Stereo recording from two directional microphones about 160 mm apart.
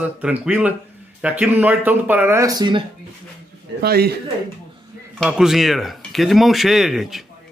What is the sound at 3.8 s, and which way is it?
Speech, 75° right (ahead or behind).